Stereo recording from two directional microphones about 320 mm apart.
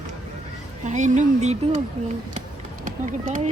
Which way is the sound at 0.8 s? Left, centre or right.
Right.